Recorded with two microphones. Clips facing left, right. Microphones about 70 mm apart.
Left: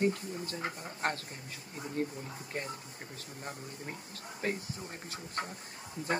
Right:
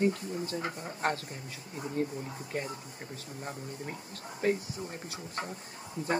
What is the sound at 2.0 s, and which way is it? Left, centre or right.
Speech, left.